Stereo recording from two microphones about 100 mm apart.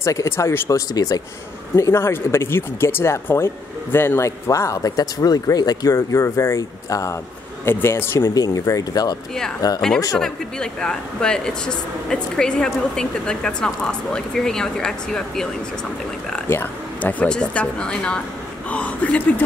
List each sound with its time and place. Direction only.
0.0 s speech: 30° left (ahead or behind)
1.8 s speech: 25° left (ahead or behind)
8.4 s speech: 35° left (ahead or behind)
9.8 s speech: 5° left (ahead or behind)
16.4 s speech: 20° left (ahead or behind)